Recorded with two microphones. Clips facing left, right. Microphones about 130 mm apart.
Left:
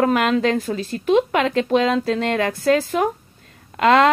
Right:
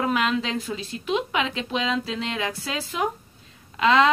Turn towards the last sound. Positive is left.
turn(degrees=50)  # may be behind; listen again after turning